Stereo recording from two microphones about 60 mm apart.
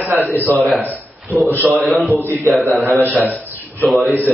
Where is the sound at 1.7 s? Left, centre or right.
Centre.